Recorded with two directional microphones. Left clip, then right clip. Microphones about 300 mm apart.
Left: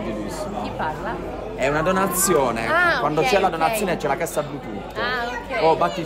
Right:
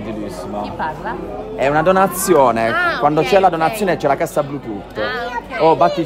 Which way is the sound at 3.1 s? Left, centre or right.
Right.